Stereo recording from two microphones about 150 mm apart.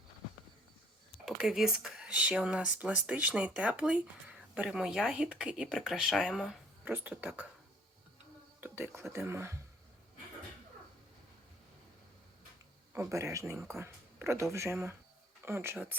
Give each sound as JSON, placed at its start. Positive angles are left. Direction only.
{"t": 1.2, "sound": "speech", "side_deg": 0}
{"t": 8.6, "sound": "speech", "side_deg": -15}
{"t": 12.9, "sound": "speech", "side_deg": -20}